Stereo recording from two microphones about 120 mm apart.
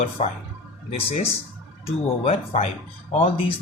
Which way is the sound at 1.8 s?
60° left (ahead or behind).